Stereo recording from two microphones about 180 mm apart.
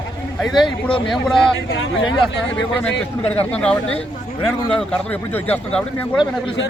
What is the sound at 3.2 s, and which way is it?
A man's voice, 5° left (ahead or behind).